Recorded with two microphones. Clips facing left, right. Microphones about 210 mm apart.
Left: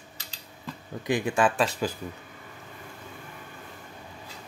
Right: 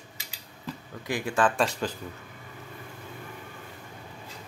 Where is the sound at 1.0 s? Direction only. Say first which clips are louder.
Left 2 dB; 20° left (ahead or behind).